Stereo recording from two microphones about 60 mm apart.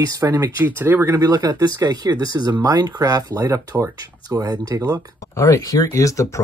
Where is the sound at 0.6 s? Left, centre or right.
Right.